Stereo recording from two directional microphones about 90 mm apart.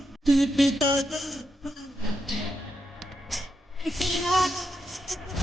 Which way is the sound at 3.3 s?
Centre (ahead or behind).